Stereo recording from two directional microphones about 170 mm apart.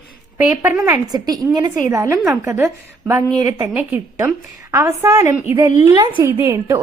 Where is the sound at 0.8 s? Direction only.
25° right (ahead or behind).